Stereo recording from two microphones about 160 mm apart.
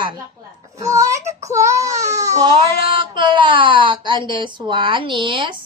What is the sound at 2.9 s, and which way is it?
Speech, 30° right (ahead or behind).